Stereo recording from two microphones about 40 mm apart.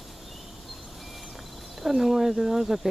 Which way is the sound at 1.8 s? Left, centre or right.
Centre.